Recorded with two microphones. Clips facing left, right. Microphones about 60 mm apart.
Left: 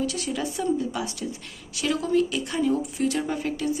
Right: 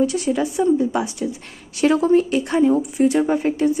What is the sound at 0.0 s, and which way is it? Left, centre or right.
Speech, right.